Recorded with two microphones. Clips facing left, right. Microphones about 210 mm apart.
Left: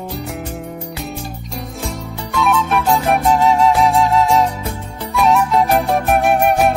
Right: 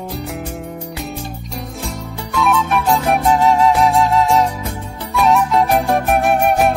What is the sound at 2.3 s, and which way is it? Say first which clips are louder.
Music: even; centre (ahead or behind).